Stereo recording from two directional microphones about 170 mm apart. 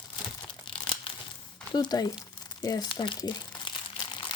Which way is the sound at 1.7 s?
25° left (ahead or behind).